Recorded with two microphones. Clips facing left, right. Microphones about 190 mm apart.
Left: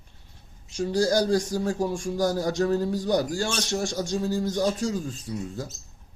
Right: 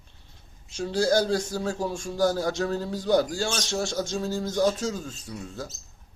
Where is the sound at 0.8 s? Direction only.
15° left (ahead or behind).